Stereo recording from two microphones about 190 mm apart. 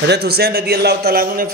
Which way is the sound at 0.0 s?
60° right (ahead or behind).